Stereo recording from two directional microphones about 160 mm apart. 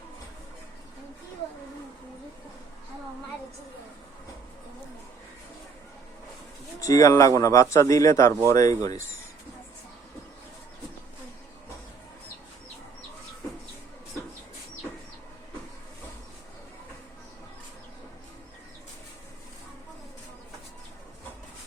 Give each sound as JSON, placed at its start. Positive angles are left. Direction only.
{"t": 6.7, "sound": "speech", "side_deg": 20}